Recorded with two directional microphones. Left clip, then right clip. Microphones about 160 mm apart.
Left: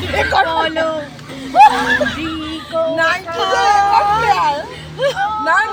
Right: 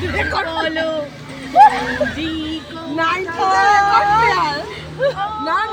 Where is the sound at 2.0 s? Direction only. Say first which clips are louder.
Left 1 dB; centre (ahead or behind).